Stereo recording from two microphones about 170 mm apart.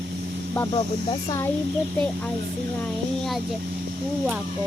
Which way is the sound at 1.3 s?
15° left (ahead or behind).